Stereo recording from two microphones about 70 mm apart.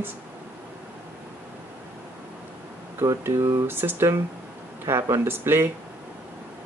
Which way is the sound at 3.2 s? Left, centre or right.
Right.